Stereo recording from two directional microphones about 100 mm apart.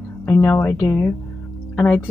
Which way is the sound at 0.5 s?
20° left (ahead or behind).